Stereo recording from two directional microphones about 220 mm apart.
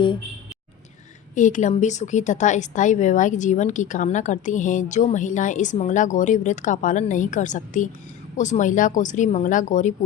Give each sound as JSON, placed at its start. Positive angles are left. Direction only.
{"t": 1.4, "sound": "a woman's voice", "side_deg": 35}